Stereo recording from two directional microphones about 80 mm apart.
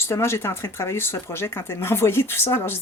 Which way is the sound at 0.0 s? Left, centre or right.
Left.